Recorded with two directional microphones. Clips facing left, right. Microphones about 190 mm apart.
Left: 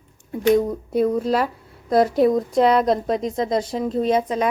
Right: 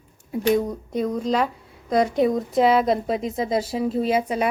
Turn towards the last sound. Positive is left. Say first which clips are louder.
# left 2 dB
turn(degrees=-10)  # may be behind; listen again after turning